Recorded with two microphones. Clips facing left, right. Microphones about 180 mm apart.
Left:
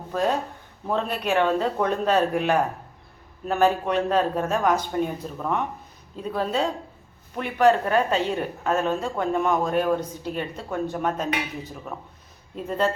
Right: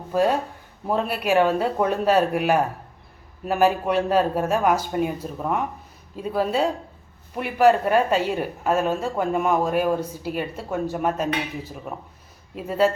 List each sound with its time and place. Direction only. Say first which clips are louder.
0.1 s a woman's voice: right 3 dB; 10° right (ahead or behind)